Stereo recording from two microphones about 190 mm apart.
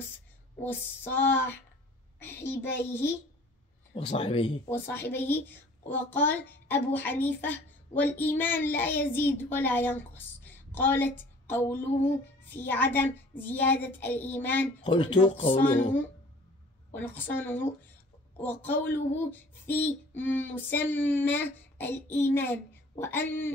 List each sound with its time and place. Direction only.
0.7 s a woman's voice: 10° left (ahead or behind)
3.9 s speech: 30° left (ahead or behind)
4.6 s a woman's voice: 10° left (ahead or behind)
14.9 s speech: 25° left (ahead or behind)
17.0 s a woman's voice: 10° left (ahead or behind)